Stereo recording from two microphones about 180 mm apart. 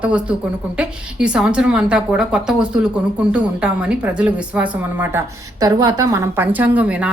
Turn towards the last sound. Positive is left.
turn(degrees=-5)  # may be behind; listen again after turning